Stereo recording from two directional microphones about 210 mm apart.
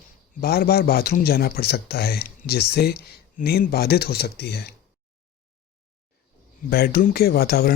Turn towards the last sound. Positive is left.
turn(degrees=45)  # may be behind; listen again after turning